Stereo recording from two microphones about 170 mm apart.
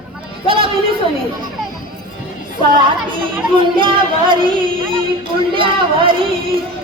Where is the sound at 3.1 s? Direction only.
30° right (ahead or behind).